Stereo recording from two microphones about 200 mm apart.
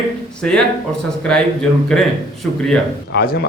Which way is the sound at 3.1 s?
55° left (ahead or behind).